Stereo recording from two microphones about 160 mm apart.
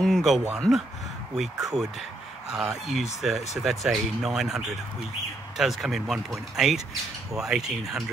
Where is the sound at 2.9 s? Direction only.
Centre (ahead or behind).